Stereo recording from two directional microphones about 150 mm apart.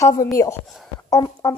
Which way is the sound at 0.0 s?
20° left (ahead or behind).